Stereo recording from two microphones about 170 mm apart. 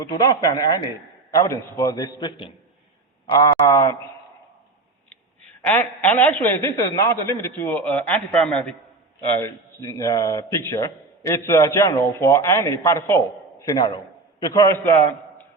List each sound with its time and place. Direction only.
0.0 s a man's voice: 25° left (ahead or behind)
5.6 s a man's voice: 10° left (ahead or behind)
9.3 s a man's voice: 15° left (ahead or behind)